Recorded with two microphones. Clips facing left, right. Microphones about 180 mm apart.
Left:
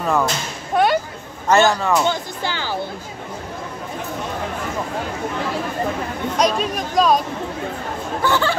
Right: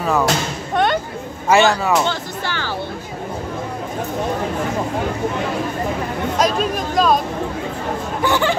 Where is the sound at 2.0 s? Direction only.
15° left (ahead or behind).